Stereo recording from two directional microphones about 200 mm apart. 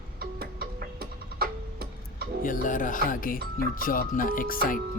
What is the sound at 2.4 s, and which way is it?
Speech, 40° left (ahead or behind).